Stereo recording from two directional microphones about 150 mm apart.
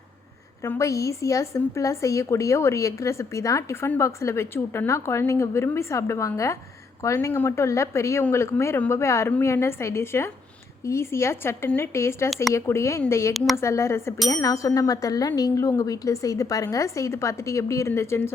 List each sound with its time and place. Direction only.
0.6 s a woman's voice: 20° left (ahead or behind)
13.3 s speech: centre (ahead or behind)
13.6 s a woman's voice: 20° left (ahead or behind)